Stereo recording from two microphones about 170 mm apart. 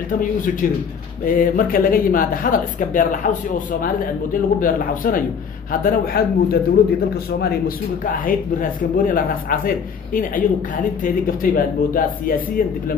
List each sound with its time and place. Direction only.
0.2 s speech: 50° left (ahead or behind)